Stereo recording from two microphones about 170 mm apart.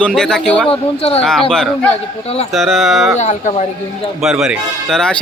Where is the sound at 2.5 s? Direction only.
Centre (ahead or behind).